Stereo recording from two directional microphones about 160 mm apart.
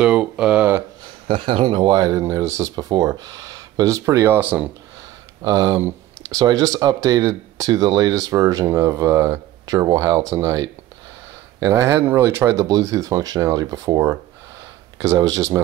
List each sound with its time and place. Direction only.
0.0 s a sound: 5° right (ahead or behind)
1.2 s speech: 35° right (ahead or behind); by 4.6 s 10° right (ahead or behind)
5.4 s speech: 25° right (ahead or behind)